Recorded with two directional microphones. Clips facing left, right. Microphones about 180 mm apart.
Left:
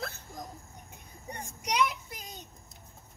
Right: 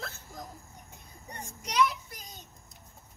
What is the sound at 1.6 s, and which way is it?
Child singing, 20° left (ahead or behind).